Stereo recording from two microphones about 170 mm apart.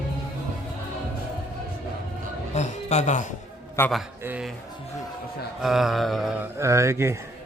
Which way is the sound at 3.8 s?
15° left (ahead or behind).